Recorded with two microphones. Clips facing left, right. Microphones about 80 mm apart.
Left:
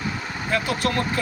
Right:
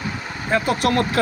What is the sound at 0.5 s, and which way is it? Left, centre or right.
Speech, right.